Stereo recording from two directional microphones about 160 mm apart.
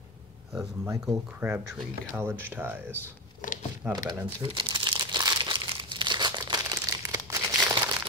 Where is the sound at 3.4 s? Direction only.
55° left (ahead or behind).